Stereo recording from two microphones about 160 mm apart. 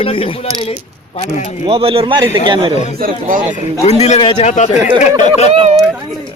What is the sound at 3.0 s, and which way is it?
Speech, 60° right (ahead or behind).